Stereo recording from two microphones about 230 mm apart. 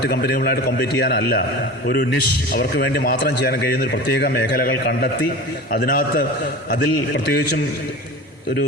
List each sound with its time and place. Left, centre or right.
0.0 s a man's voice: left
2.5 s a man's voice: left